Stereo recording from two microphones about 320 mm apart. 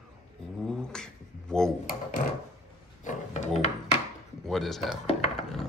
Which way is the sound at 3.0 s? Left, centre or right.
Left.